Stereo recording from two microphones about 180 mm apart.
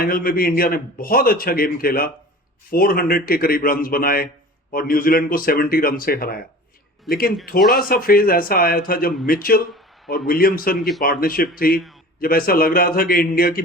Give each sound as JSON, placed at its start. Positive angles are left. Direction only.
{"t": 0.0, "sound": "a man's voice", "side_deg": 55}